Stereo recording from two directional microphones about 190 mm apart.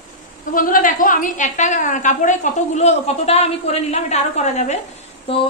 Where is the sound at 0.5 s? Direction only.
45° left (ahead or behind).